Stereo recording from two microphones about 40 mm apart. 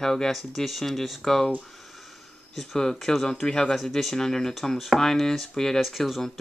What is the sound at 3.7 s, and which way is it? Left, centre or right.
Speech, centre.